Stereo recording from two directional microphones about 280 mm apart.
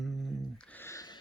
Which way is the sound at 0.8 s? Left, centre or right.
Centre.